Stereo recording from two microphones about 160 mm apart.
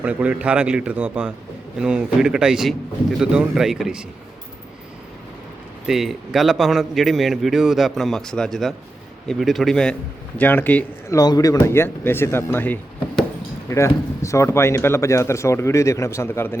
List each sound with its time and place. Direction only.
0.0 s a man's voice: 10° right (ahead or behind)
5.8 s a man's voice: centre (ahead or behind)
11.1 s speech: 25° left (ahead or behind)